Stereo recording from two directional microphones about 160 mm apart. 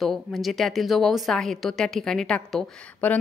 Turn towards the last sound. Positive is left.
turn(degrees=5)  # may be behind; listen again after turning